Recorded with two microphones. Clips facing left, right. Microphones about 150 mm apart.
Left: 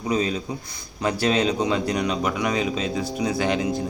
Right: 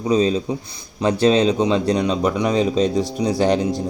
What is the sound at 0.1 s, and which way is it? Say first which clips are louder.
Speech: right 6 dB; 30° right (ahead or behind).